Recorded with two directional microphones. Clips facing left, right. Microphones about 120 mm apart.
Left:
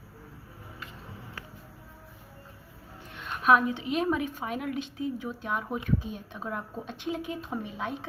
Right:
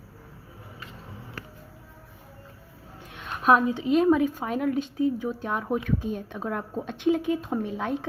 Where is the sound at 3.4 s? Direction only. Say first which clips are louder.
Right 2 dB; 35° right (ahead or behind).